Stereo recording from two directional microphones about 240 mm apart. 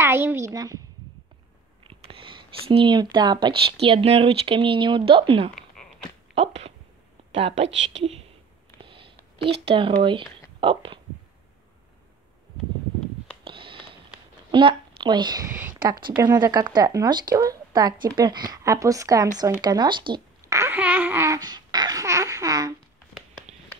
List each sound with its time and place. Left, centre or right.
0.0 s a child's voice: centre
1.9 s speech: right
5.5 s a sound: centre
6.3 s speech: right
8.0 s speech: right
8.8 s a sound: right
9.7 s speech: right
13.4 s a sound: right
14.5 s a woman's voice: right